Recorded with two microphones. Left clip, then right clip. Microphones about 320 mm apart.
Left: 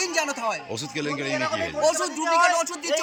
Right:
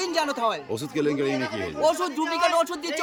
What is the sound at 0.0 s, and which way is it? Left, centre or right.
A man's voice, centre.